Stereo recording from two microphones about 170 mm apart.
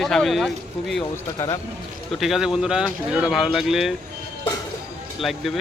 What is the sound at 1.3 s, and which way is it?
Speech, 20° left (ahead or behind).